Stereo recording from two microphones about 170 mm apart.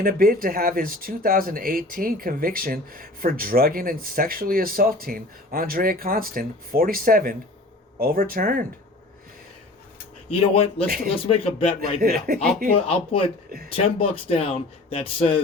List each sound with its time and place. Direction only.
0.0 s speech: 60° right (ahead or behind)
10.2 s speech: 35° left (ahead or behind)
10.8 s speech: 60° right (ahead or behind)
11.3 s speech: 35° left (ahead or behind)
12.0 s speech: 60° right (ahead or behind)
12.7 s speech: 35° left (ahead or behind)